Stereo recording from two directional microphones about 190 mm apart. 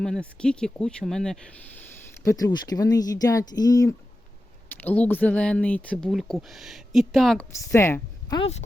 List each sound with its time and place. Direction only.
0.0 s speech: 5° left (ahead or behind)
2.2 s speech: 20° left (ahead or behind); by 7.4 s centre (ahead or behind)
7.7 s a woman's voice: 15° left (ahead or behind)